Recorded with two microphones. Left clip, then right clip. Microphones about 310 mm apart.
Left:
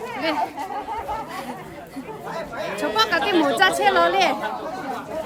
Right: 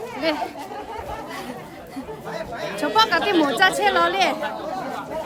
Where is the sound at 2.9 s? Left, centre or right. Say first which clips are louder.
Right 2 dB; centre.